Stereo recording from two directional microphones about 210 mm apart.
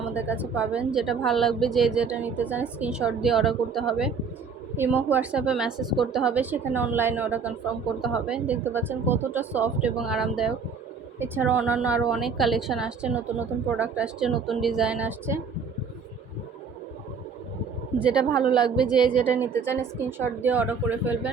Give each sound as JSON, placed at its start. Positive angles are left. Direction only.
{"t": 0.1, "sound": "a woman's voice", "side_deg": -5}
{"t": 17.9, "sound": "a woman's voice", "side_deg": -5}
{"t": 18.3, "sound": "a woman's voice", "side_deg": 20}
{"t": 19.2, "sound": "a woman's voice", "side_deg": -10}